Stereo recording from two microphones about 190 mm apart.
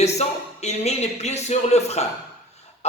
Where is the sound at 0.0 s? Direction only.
35° left (ahead or behind).